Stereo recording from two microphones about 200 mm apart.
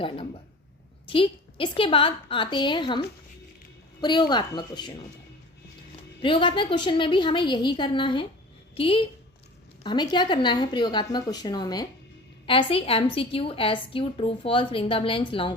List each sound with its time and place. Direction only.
1.1 s a woman's voice: 25° left (ahead or behind)
4.0 s a woman's voice: 20° left (ahead or behind)
6.2 s a woman's voice: 25° left (ahead or behind)